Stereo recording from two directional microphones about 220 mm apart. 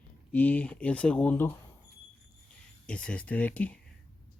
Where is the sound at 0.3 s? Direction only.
5° left (ahead or behind).